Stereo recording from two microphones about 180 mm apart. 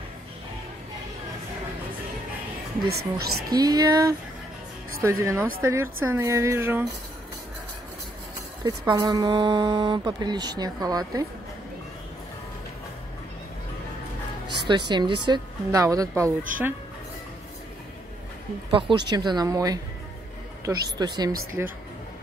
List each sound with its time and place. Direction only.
2.9 s speech: 60° right (ahead or behind)
3.4 s a woman's voice: 20° right (ahead or behind)
8.6 s speech: 20° right (ahead or behind)
14.9 s speech: 25° right (ahead or behind)
18.7 s speech: 25° right (ahead or behind)
21.6 s a woman's voice: 10° right (ahead or behind)